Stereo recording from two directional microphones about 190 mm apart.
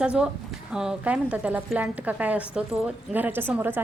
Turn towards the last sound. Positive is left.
turn(degrees=-10)  # may be behind; listen again after turning